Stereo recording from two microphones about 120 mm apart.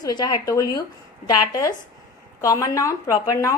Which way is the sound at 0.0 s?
35° left (ahead or behind).